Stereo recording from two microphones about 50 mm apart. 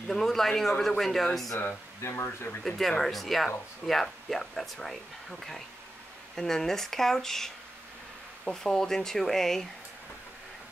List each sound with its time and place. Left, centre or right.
0.1 s speech: centre
2.0 s speech: left
2.6 s speech: centre
6.3 s speech: centre